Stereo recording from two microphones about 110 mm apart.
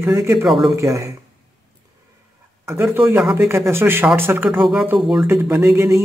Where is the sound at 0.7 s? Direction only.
30° right (ahead or behind).